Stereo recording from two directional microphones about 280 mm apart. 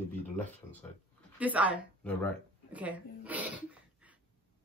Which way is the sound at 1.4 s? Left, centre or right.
Centre.